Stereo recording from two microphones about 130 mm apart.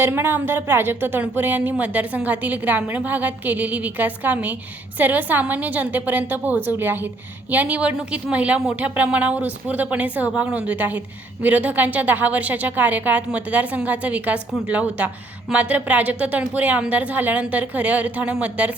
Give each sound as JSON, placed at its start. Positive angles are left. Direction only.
{"t": 0.0, "sound": "a woman's voice", "side_deg": -15}